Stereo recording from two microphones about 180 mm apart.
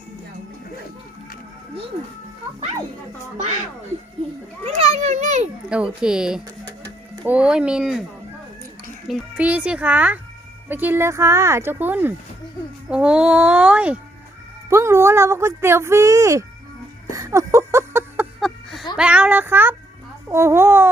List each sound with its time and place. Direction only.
4.6 s children playing: 35° right (ahead or behind)
4.9 s a sound: 40° right (ahead or behind)
5.6 s speech: 5° right (ahead or behind)
6.7 s music: 20° right (ahead or behind)
7.3 s speech: 5° right (ahead or behind)
9.0 s speech: 5° right (ahead or behind)
17.1 s a sound: 15° right (ahead or behind)
18.3 s a sound: centre (ahead or behind)
18.9 s speech: 5° right (ahead or behind)